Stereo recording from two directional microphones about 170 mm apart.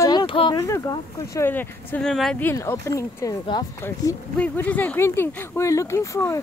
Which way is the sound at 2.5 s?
15° left (ahead or behind).